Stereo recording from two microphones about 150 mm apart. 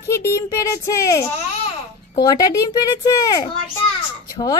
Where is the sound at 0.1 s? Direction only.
20° left (ahead or behind).